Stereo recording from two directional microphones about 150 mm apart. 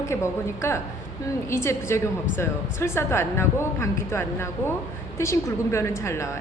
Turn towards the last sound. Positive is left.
turn(degrees=20)  # may be behind; listen again after turning